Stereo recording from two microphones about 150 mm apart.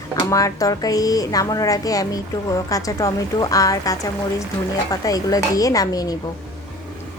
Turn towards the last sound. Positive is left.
turn(degrees=25)  # may be behind; listen again after turning